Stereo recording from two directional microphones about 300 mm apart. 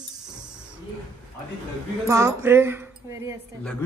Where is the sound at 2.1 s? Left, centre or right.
Centre.